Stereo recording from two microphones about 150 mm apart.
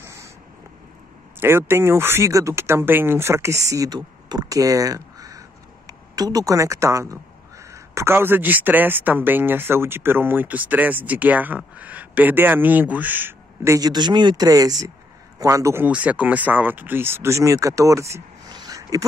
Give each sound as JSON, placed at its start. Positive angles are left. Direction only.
{"t": 0.0, "sound": "a sound", "side_deg": -20}
{"t": 1.4, "sound": "speech", "side_deg": -15}
{"t": 13.7, "sound": "speech", "side_deg": -30}